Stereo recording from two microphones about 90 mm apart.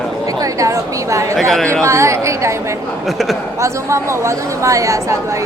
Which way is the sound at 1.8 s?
30° right (ahead or behind).